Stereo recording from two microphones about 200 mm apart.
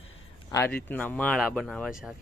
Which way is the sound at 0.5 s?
10° left (ahead or behind).